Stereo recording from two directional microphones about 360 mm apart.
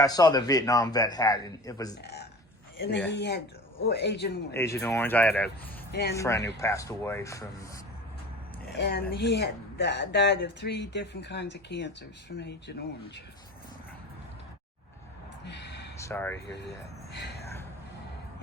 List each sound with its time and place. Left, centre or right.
0.0 s a man's voice: centre
3.1 s speech: left
4.5 s a man's voice: centre
5.9 s speech: left
6.1 s a man's voice: centre
8.7 s speech: left
15.4 s a sound: left
16.0 s speech: centre
16.5 s speech: left